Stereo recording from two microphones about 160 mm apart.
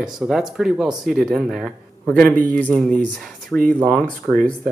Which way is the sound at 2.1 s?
10° left (ahead or behind).